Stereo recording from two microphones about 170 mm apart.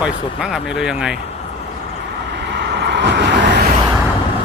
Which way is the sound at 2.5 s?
80° right.